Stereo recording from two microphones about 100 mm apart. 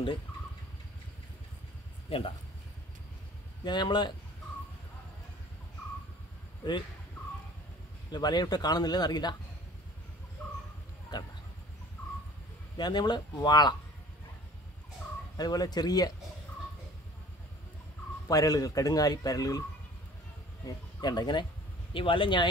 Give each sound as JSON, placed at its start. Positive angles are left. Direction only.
{"t": 2.0, "sound": "speech", "side_deg": 70}
{"t": 3.6, "sound": "a man's voice", "side_deg": 45}
{"t": 8.1, "sound": "a man's voice", "side_deg": 45}
{"t": 10.4, "sound": "bird", "side_deg": 20}
{"t": 11.1, "sound": "speech", "side_deg": 45}
{"t": 12.7, "sound": "a man's voice", "side_deg": 45}
{"t": 15.3, "sound": "speech", "side_deg": 40}
{"t": 18.3, "sound": "speech", "side_deg": 35}
{"t": 20.6, "sound": "speech", "side_deg": 45}
{"t": 21.9, "sound": "speech", "side_deg": 60}